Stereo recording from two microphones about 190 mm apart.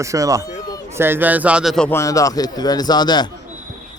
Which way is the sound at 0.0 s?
15° right (ahead or behind).